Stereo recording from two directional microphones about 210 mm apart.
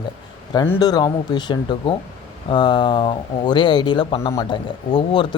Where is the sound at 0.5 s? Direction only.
15° left (ahead or behind).